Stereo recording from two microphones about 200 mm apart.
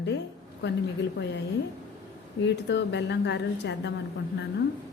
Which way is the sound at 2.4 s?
60° left (ahead or behind).